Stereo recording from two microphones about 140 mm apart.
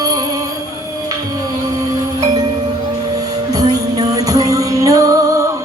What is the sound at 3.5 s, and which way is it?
Music, 25° right (ahead or behind).